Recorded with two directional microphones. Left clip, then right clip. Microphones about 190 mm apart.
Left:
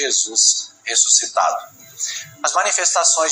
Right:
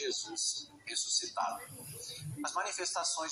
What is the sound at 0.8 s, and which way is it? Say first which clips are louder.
Speech: left 18 dB; 40° left (ahead or behind).